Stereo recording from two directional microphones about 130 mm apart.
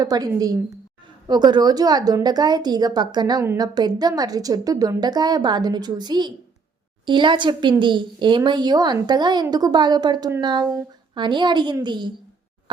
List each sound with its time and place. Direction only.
0.0 s a woman's voice: 30° right (ahead or behind)